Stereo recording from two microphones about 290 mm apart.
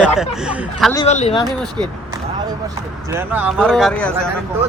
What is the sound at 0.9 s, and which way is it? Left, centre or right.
Speech, centre.